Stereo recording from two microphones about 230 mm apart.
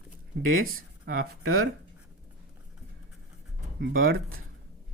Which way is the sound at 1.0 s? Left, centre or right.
Right.